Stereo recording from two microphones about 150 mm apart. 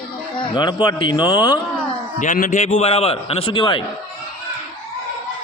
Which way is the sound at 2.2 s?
55° left (ahead or behind).